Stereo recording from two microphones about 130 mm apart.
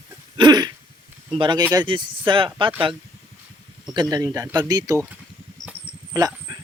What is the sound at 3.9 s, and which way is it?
Speech, 30° right (ahead or behind).